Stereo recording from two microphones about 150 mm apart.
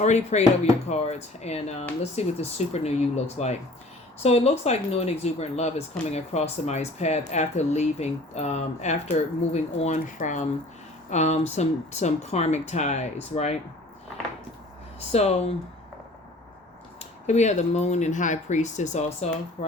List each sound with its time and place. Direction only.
0.0 s speech: 50° left (ahead or behind)
15.1 s speech: 45° left (ahead or behind)
17.2 s speech: 50° left (ahead or behind)